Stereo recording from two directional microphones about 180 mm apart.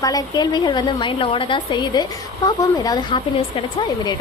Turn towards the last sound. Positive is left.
turn(degrees=25)  # may be behind; listen again after turning